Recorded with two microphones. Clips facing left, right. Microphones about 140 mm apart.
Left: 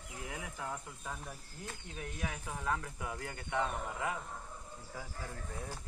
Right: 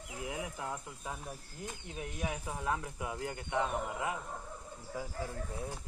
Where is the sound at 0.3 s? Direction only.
20° right (ahead or behind).